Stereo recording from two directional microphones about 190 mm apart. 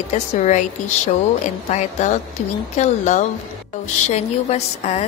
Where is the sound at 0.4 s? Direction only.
40° left (ahead or behind).